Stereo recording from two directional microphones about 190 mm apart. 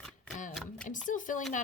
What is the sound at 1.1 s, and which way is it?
Speech, 40° left (ahead or behind).